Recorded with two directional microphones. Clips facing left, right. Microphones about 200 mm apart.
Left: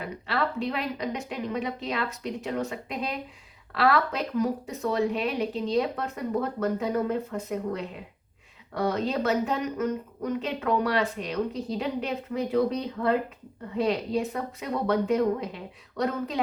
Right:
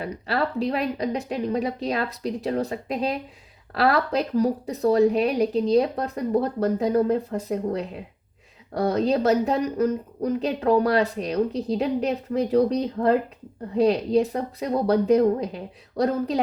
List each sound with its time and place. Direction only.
0.0 s a woman's voice: 35° right (ahead or behind)